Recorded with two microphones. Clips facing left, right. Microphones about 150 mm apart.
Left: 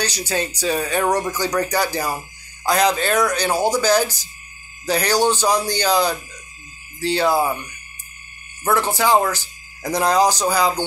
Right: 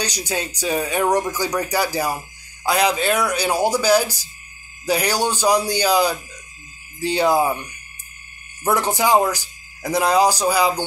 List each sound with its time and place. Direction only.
0.0 s speech: 15° right (ahead or behind)
8.6 s speech: 15° right (ahead or behind)